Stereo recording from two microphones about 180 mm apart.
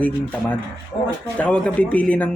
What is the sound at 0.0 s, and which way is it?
Speech, 10° left (ahead or behind).